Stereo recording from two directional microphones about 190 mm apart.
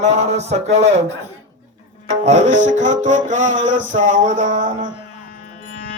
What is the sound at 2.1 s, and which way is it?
Music, 40° right (ahead or behind).